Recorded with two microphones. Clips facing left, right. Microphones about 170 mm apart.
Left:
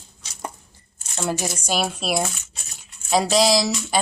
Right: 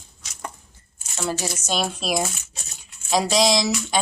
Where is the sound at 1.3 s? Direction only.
15° left (ahead or behind).